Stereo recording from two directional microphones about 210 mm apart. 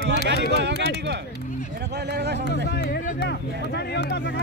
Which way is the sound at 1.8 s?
50° right (ahead or behind).